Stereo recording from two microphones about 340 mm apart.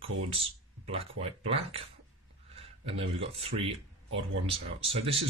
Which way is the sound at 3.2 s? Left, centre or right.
Centre.